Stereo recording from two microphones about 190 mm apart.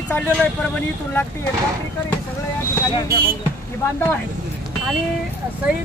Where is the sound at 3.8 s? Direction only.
15° left (ahead or behind).